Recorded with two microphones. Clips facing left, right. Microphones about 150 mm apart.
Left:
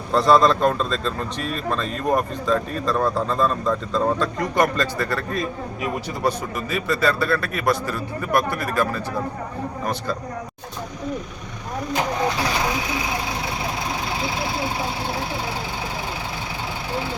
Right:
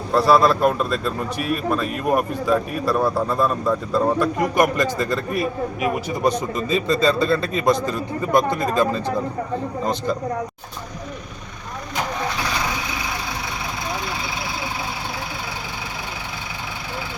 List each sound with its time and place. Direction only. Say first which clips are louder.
0.1 s a man's voice: even; 5° right (ahead or behind)